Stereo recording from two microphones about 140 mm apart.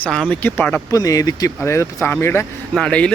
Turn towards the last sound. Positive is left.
turn(degrees=10)  # may be behind; listen again after turning